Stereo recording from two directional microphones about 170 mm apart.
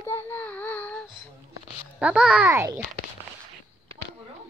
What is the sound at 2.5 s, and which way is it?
Speech, 15° right (ahead or behind).